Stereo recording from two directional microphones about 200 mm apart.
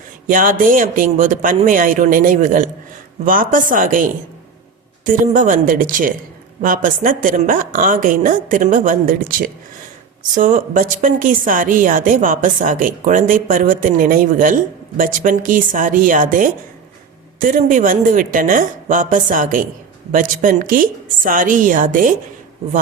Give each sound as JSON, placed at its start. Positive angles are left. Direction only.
{"t": 0.3, "sound": "a woman's voice", "side_deg": -45}